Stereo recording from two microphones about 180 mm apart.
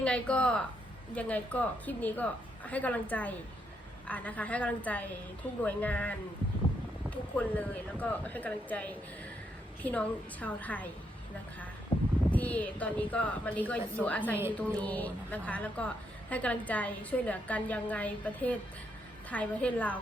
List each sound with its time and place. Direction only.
0.0 s a woman's voice: 5° left (ahead or behind)
11.9 s a sound: 25° left (ahead or behind)
12.3 s a woman's voice: 10° left (ahead or behind)